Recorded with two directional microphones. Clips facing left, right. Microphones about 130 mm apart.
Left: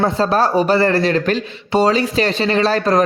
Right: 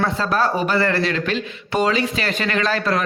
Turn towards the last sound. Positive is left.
turn(degrees=40)  # may be behind; listen again after turning